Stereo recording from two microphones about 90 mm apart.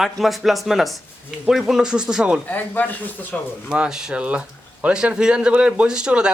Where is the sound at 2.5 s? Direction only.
20° left (ahead or behind).